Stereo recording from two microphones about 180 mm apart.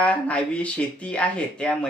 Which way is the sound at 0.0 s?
5° left (ahead or behind).